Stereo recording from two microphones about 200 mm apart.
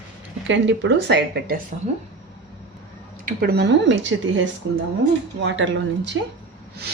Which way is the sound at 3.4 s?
55° right (ahead or behind).